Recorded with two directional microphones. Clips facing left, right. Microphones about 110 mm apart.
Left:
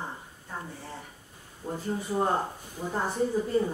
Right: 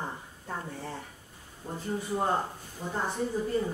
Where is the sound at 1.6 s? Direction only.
25° left (ahead or behind).